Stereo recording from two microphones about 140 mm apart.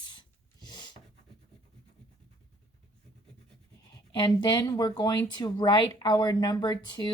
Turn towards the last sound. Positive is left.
turn(degrees=30)  # may be behind; listen again after turning